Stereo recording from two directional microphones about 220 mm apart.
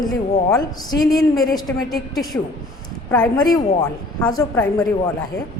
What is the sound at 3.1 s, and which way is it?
A woman's voice, 15° left (ahead or behind).